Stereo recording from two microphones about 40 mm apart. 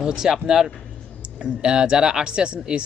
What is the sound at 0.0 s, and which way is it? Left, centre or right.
Speech, centre.